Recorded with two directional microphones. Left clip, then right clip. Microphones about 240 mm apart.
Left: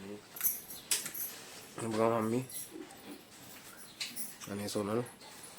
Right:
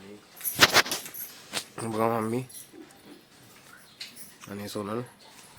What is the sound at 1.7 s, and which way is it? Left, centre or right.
Speech, centre.